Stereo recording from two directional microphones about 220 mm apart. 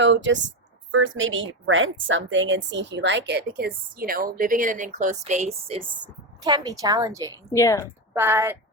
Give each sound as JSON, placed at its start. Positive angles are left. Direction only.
{"t": 0.0, "sound": "speech", "side_deg": -55}
{"t": 6.4, "sound": "a woman's voice", "side_deg": -15}
{"t": 7.5, "sound": "a woman's voice", "side_deg": 15}
{"t": 8.1, "sound": "a woman's voice", "side_deg": -10}